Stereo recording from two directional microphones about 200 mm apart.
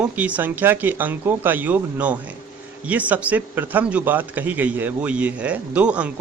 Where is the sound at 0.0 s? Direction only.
5° right (ahead or behind).